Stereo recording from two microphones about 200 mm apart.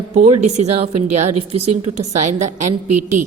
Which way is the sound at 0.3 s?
35° right (ahead or behind).